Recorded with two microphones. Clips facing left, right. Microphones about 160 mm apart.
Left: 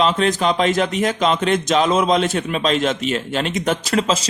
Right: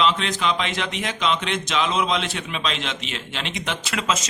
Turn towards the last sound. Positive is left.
turn(degrees=35)  # may be behind; listen again after turning